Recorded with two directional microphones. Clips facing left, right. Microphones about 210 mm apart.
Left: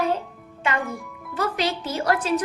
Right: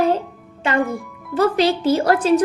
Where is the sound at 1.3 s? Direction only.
30° right (ahead or behind).